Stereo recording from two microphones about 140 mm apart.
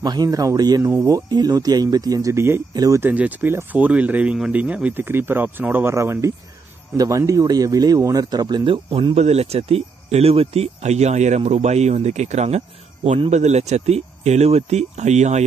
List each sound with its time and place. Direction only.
0.0 s speech: 30° right (ahead or behind)
3.0 s speech: 10° right (ahead or behind); by 15.4 s 55° right (ahead or behind)